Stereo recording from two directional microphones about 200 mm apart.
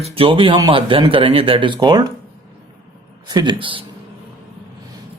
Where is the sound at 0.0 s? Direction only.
25° right (ahead or behind).